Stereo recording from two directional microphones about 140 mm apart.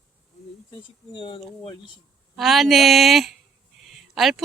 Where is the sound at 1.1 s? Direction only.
35° left (ahead or behind).